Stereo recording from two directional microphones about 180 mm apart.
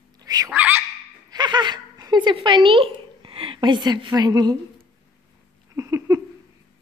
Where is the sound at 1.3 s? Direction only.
25° right (ahead or behind).